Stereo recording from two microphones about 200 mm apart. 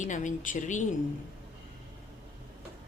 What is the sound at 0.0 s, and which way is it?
Speech, 40° left (ahead or behind).